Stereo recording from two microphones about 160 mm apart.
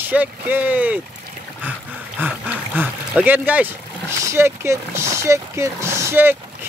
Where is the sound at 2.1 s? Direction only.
10° right (ahead or behind).